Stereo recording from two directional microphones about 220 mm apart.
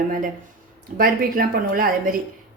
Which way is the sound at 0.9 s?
40° right (ahead or behind).